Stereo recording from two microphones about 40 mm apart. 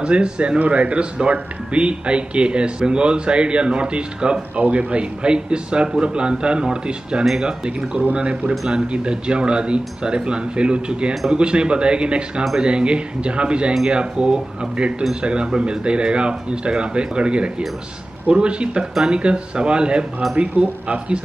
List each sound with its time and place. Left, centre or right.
0.0 s speech: right
0.6 s speech: right
4.6 s speech: right
5.2 s speech: right